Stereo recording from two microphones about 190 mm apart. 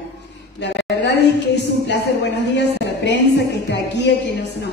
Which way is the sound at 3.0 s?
65° left (ahead or behind).